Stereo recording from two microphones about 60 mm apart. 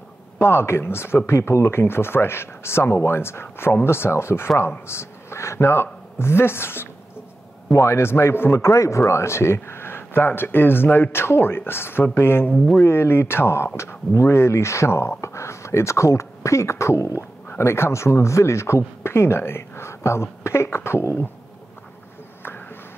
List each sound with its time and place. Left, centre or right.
0.4 s speech: left